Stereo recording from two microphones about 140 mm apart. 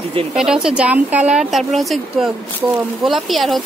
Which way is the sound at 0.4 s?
5° right (ahead or behind).